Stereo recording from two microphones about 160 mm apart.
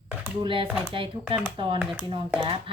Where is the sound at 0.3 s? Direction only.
35° right (ahead or behind).